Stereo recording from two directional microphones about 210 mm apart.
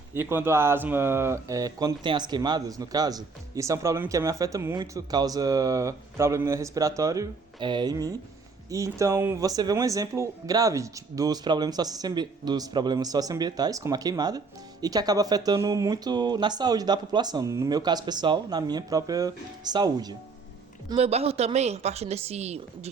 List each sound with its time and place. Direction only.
0.1 s speech: 10° right (ahead or behind)
20.9 s a woman's voice: 30° right (ahead or behind)